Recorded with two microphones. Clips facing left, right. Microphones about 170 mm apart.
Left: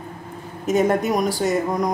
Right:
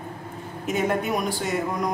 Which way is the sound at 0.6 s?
40° left (ahead or behind).